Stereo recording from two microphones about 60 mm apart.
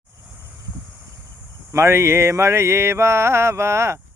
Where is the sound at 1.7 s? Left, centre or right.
Right.